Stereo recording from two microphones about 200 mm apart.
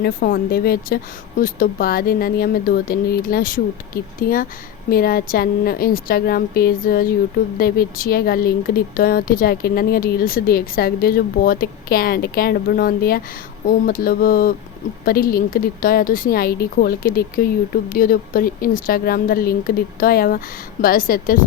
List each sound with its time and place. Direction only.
0.0 s speech: 50° left (ahead or behind)